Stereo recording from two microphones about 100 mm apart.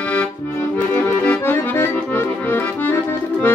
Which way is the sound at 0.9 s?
15° left (ahead or behind).